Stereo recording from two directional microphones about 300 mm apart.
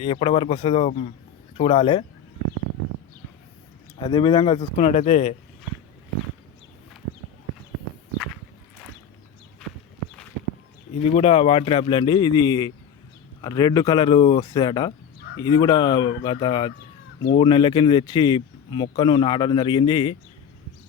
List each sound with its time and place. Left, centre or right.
0.0 s speech: centre
3.9 s speech: centre
11.1 s speech: left